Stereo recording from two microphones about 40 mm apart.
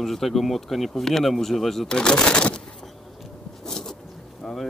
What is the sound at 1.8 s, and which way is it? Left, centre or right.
Speech, left.